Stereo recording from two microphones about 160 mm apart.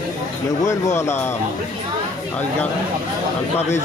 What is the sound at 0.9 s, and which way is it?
Speech, 15° left (ahead or behind).